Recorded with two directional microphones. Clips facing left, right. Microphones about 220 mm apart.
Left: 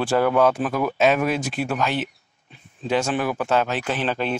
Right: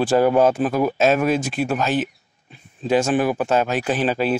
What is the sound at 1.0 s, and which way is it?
Speech, 45° right (ahead or behind).